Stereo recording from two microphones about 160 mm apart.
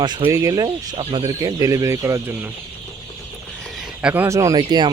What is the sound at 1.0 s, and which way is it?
Speech, 40° right (ahead or behind).